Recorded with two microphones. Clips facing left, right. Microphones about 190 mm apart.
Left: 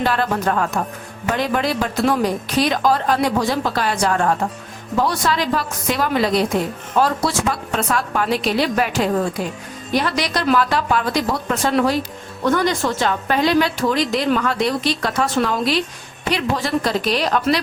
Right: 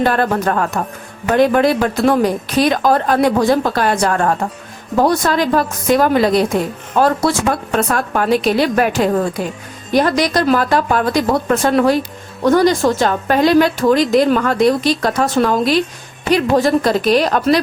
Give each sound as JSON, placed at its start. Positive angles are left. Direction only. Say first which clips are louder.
{"t": 0.0, "sound": "a woman's voice", "louder": "right 4 dB", "side_deg": -50}
{"t": 12.5, "sound": "a woman's voice", "louder": "right 6 dB", "side_deg": -40}